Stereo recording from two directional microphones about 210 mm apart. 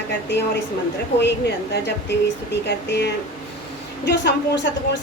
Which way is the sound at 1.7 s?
55° left (ahead or behind).